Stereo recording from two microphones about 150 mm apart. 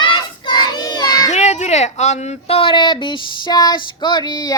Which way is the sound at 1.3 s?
50° left (ahead or behind).